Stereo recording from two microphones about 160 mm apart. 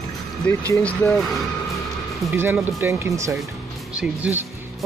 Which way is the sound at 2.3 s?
15° right (ahead or behind).